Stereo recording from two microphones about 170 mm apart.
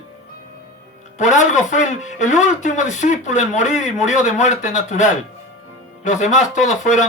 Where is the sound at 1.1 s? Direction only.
45° left (ahead or behind).